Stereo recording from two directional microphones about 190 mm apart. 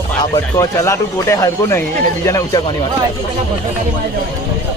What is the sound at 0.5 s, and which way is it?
Speech, 15° left (ahead or behind).